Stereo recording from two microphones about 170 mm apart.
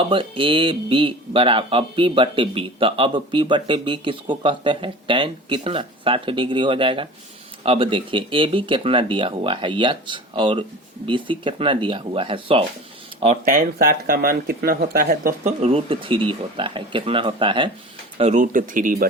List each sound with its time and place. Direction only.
0.0 s speech: 30° right (ahead or behind)
13.4 s speech: 55° right (ahead or behind)
15.6 s speech: 35° right (ahead or behind)
18.2 s speech: 45° right (ahead or behind)